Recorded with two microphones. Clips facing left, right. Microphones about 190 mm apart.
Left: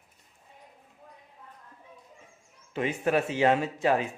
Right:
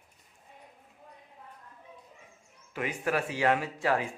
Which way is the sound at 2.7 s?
25° left (ahead or behind).